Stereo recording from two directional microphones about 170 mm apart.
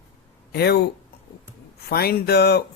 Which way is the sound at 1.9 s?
65° left (ahead or behind).